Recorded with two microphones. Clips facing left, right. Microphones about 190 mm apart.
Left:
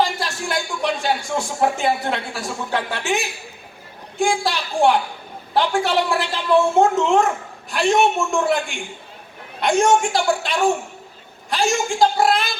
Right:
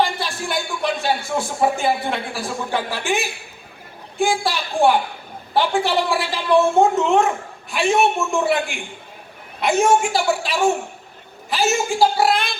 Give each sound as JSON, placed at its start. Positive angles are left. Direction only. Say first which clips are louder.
{"t": 0.0, "sound": "a man's voice", "louder": "even", "side_deg": 0}